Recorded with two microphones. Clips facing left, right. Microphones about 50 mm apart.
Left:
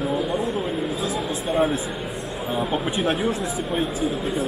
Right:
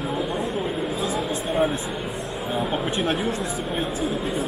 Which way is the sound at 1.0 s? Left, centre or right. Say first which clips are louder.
Even; centre.